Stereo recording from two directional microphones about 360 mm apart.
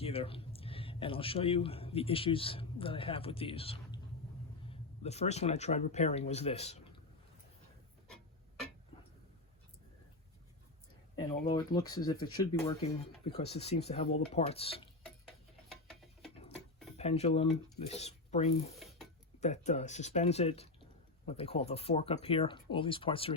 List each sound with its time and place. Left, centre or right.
0.0 s a man's voice: centre
11.2 s speech: centre
15.0 s tick-tock: centre
16.3 s a sound: centre
17.0 s speech: centre
18.8 s a sound: centre
19.4 s speech: centre